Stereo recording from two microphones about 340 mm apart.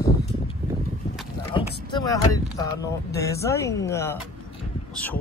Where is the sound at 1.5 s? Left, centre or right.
Centre.